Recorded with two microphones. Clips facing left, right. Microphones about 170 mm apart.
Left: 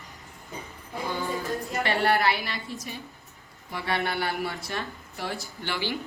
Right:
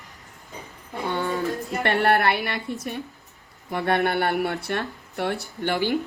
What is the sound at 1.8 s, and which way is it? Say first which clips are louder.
Speech: right 4 dB; 60° right (ahead or behind).